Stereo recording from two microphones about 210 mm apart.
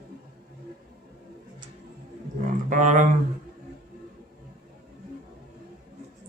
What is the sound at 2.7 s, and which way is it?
Speech, 35° right (ahead or behind).